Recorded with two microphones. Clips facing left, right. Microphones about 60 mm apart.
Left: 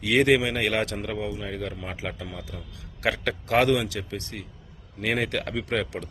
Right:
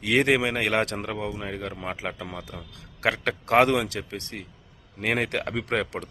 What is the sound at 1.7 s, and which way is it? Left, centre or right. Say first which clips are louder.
Speech: right 3 dB; right.